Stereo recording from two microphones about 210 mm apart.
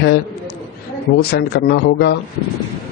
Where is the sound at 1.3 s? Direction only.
50° left (ahead or behind).